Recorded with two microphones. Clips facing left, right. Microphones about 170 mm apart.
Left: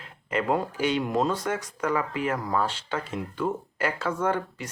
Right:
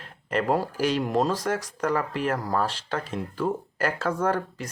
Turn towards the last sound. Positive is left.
turn(degrees=-40)  # may be behind; listen again after turning